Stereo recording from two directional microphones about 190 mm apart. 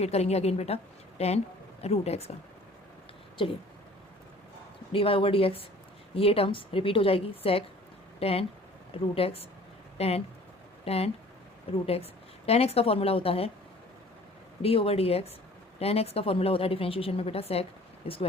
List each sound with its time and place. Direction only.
0.0 s a woman's voice: 35° left (ahead or behind)
4.9 s a woman's voice: 30° left (ahead or behind)
14.6 s a woman's voice: 30° left (ahead or behind)